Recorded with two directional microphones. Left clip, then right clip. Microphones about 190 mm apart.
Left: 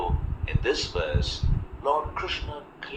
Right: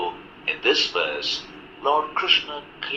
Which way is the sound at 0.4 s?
15° right (ahead or behind).